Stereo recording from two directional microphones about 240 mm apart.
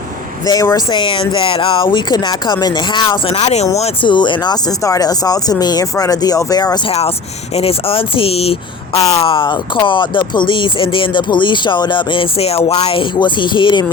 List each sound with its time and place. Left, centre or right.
0.4 s speech: centre